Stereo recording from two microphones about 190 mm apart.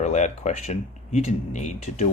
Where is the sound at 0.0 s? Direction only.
40° left (ahead or behind).